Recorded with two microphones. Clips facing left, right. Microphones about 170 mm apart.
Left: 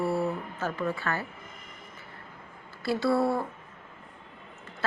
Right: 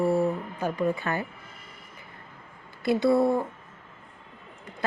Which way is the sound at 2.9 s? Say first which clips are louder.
Right 4 dB; 20° right (ahead or behind).